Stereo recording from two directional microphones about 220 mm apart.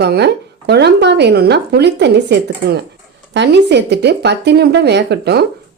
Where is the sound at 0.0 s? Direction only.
50° right (ahead or behind).